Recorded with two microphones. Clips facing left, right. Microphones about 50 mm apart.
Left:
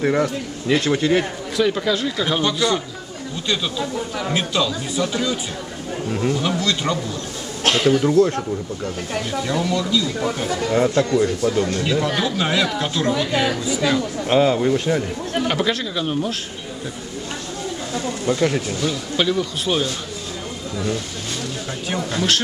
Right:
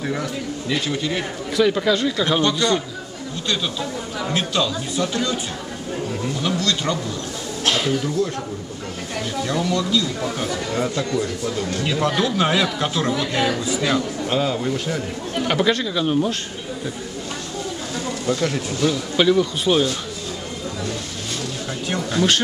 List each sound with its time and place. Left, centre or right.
0.0 s speech: left
1.6 s speech: centre
4.2 s speech: centre
7.6 s a sound: left
9.3 s speech: centre
10.7 s a man's voice: centre
11.7 s speech: centre
14.2 s a man's voice: left
15.4 s speech: centre
18.2 s speech: centre
18.8 s speech: centre
21.8 s speech: centre